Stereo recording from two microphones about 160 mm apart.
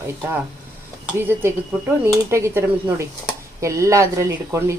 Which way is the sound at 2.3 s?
15° right (ahead or behind).